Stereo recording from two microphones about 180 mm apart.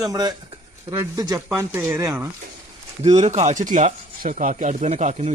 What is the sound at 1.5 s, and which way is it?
Speech, 10° right (ahead or behind).